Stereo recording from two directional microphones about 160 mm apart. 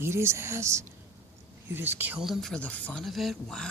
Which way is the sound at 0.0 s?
15° right (ahead or behind).